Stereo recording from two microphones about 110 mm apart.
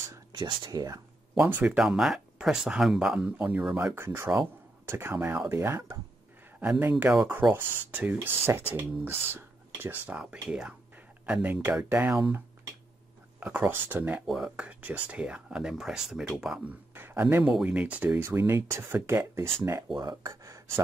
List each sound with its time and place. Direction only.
0.3 s speech: 40° right (ahead or behind)
1.5 s speech: 15° right (ahead or behind)
13.4 s speech: 15° right (ahead or behind)
14.2 s speech: 5° right (ahead or behind)
16.9 s a sound: 20° right (ahead or behind)
17.5 s speech: 10° right (ahead or behind)
20.0 s speech: 35° right (ahead or behind)